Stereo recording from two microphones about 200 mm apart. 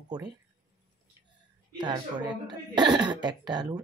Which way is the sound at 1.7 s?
20° right (ahead or behind).